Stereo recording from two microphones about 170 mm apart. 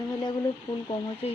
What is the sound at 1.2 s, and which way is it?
Speech, 35° left (ahead or behind).